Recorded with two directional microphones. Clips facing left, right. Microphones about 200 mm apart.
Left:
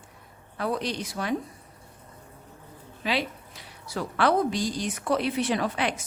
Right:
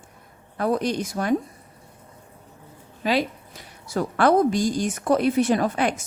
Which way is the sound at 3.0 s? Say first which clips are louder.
Right 6 dB; 45° right (ahead or behind).